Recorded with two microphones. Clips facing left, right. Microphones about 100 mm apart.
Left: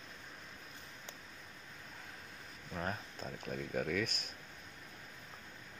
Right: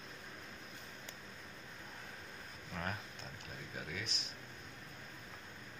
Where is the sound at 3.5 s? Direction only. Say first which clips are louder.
Left 11 dB; 55° left (ahead or behind).